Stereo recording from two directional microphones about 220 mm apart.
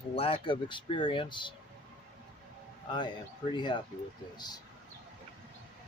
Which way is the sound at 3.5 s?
20° left (ahead or behind).